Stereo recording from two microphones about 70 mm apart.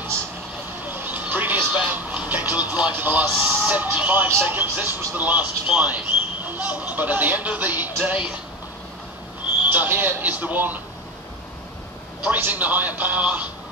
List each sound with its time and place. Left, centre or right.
0.8 s speech: right
9.7 s speech: right
12.3 s speech: right